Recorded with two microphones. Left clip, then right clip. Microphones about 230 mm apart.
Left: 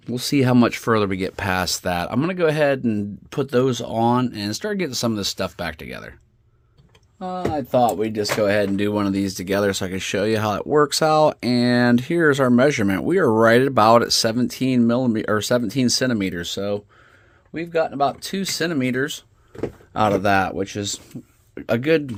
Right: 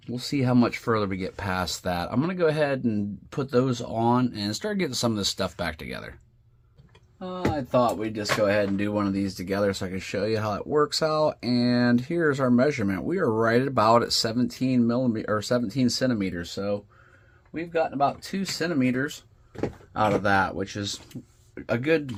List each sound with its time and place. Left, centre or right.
0.1 s speech: left
7.2 s speech: left